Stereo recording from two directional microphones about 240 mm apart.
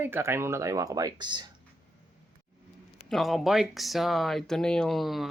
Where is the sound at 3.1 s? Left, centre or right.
Centre.